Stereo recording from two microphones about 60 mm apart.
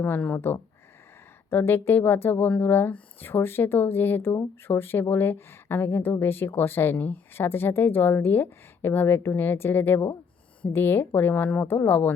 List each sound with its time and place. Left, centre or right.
0.0 s a woman's voice: left
11.6 s a woman's voice: left